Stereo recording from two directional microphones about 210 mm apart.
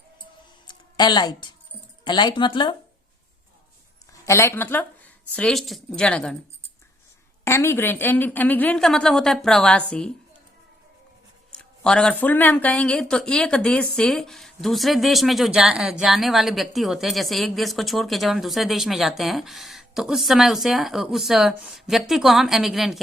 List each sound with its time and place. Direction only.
0.7 s a sound: 20° left (ahead or behind)
2.0 s speech: 20° left (ahead or behind)
4.3 s a woman's voice: 15° left (ahead or behind)
7.4 s a woman's voice: 10° left (ahead or behind)
11.5 s a woman's voice: 5° left (ahead or behind)